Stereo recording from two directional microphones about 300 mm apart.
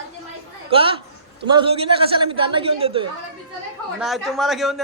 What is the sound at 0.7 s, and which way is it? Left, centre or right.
A man's voice, centre.